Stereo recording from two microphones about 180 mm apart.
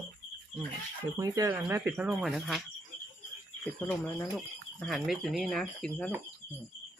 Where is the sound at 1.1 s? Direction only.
20° right (ahead or behind).